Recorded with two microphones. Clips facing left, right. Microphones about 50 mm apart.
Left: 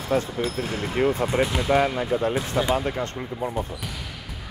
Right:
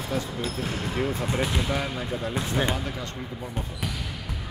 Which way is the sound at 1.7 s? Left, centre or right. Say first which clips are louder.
Left 8 dB; left.